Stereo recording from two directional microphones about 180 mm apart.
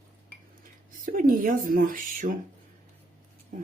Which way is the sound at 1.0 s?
50° right (ahead or behind).